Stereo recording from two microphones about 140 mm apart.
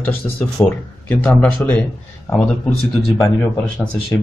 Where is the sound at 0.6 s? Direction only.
15° left (ahead or behind).